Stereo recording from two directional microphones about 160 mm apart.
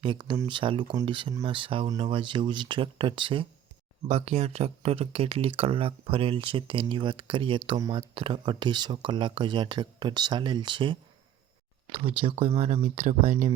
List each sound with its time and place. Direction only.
0.0 s speech: 30° right (ahead or behind); by 13.5 s 50° right (ahead or behind)